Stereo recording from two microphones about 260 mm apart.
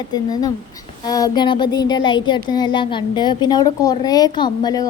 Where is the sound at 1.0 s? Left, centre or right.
Centre.